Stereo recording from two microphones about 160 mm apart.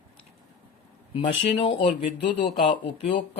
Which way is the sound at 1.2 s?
35° left (ahead or behind).